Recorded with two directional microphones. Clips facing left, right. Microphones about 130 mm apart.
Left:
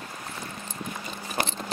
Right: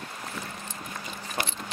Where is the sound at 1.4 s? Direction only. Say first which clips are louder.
Left 3 dB; 40° left (ahead or behind).